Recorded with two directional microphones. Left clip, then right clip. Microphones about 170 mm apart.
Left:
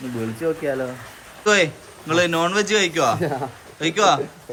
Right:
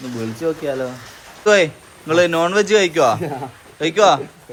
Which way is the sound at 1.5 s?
5° left (ahead or behind).